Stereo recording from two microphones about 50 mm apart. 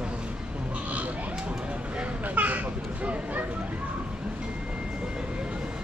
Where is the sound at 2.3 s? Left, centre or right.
Right.